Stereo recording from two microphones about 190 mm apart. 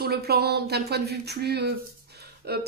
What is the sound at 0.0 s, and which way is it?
Speech, 55° right (ahead or behind).